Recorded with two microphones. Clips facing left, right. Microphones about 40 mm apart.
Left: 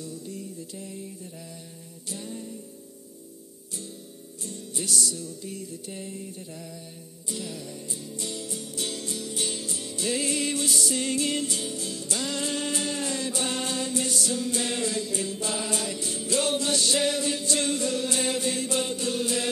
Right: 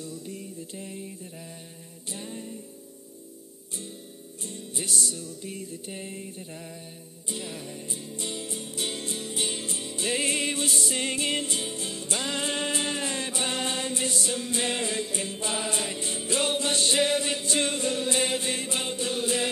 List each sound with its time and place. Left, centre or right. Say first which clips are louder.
0.0 s mantra: left 1 dB; right
2.0 s music: left 1 dB; right
4.4 s music: left 1 dB; right